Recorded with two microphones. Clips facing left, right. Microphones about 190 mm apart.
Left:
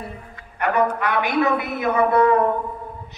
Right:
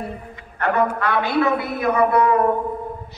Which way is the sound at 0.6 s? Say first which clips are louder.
Even; 15° left (ahead or behind).